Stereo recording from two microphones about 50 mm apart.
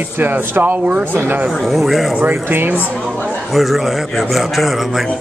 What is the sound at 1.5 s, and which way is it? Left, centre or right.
Speech, centre.